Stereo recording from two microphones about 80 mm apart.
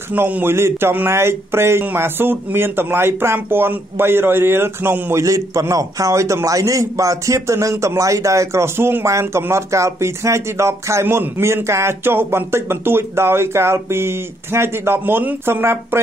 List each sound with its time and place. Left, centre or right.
0.1 s speech: right
5.2 s speech: right